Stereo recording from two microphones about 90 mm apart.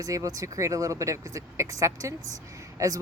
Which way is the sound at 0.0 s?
40° right (ahead or behind).